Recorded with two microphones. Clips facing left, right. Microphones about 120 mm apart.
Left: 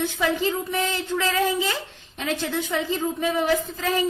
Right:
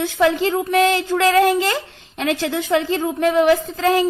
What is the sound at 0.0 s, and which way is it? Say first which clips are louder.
A woman's voice: right 6 dB; 85° right.